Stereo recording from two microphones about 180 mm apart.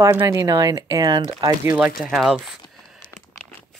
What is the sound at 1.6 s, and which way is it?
Speech, 10° right (ahead or behind).